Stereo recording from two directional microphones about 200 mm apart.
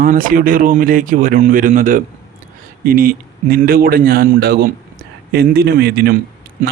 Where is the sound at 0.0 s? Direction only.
45° right (ahead or behind).